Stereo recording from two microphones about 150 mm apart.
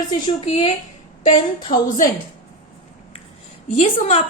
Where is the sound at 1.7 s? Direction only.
75° left (ahead or behind).